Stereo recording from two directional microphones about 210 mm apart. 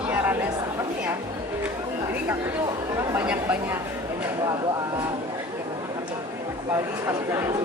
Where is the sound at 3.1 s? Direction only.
10° right (ahead or behind).